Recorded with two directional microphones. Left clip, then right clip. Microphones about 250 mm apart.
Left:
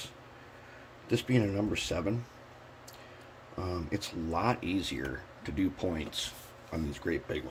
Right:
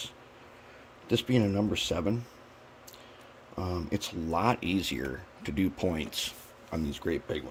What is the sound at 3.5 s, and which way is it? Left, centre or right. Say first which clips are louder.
Speech: right 2 dB; right.